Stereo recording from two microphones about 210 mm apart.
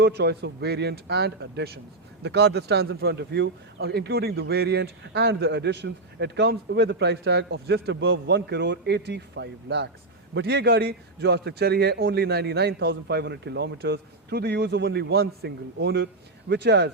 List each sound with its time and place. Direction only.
0.0 s speech: 50° right (ahead or behind)